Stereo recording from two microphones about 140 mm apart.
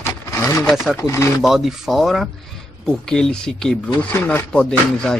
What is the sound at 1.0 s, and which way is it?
Speech, 20° left (ahead or behind).